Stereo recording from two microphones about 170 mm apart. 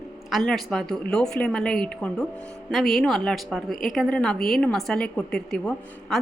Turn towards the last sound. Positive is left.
turn(degrees=5)  # may be behind; listen again after turning